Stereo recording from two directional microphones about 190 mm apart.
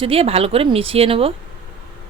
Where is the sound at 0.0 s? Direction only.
30° right (ahead or behind).